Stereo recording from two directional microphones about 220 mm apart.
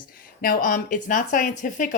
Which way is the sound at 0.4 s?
40° left (ahead or behind).